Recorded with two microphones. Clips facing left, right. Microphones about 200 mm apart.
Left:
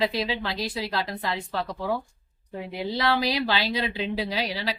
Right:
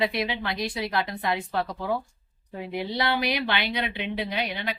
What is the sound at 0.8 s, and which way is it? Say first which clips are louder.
Speech: right 1 dB; 30° left (ahead or behind).